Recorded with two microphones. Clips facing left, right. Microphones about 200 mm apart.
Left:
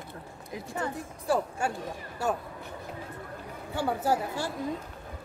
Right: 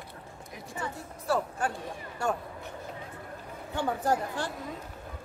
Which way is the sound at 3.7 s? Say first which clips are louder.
Left 1 dB; 5° left (ahead or behind).